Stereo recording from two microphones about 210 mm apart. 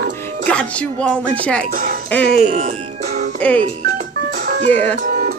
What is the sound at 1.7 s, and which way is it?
Speech, 40° right (ahead or behind).